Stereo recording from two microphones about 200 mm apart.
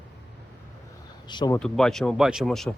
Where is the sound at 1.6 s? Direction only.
5° left (ahead or behind).